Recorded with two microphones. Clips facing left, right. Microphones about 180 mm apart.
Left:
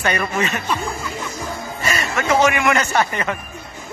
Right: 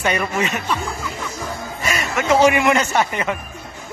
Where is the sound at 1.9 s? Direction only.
10° right (ahead or behind).